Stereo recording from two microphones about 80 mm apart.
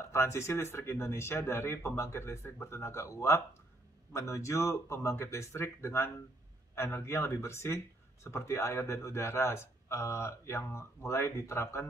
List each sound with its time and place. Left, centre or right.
0.1 s speech: left